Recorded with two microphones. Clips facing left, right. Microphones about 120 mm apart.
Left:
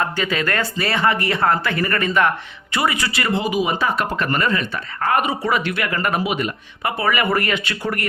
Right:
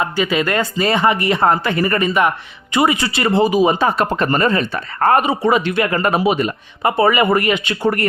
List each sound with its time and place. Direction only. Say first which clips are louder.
0.0 s speech: right 4 dB; 15° right (ahead or behind); by 5.2 s 40° right (ahead or behind)
5.2 s speech: right 5 dB; 25° right (ahead or behind)